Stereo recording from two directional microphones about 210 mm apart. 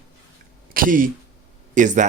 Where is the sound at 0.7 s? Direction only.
40° right (ahead or behind).